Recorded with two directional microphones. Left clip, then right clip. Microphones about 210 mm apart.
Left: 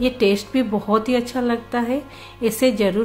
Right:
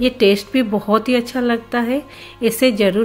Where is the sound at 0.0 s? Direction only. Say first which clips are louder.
Right 4 dB; 15° right (ahead or behind).